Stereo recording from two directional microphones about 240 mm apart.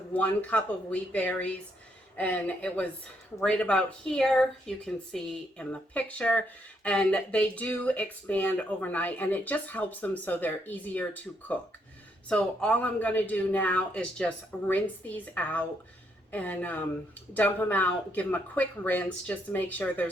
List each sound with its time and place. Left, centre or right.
0.1 s speech: centre